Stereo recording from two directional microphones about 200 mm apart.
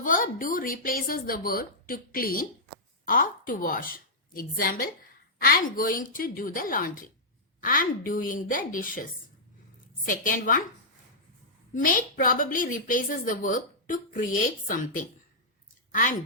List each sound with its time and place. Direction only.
0.0 s a woman's voice: 45° left (ahead or behind)
10.1 s a woman's voice: 45° left (ahead or behind)
11.7 s a woman's voice: 45° left (ahead or behind)